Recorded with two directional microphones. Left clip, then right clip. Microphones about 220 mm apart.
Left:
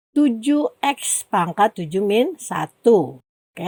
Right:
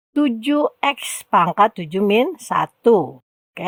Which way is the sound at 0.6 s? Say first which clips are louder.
Right 2 dB; 15° right (ahead or behind).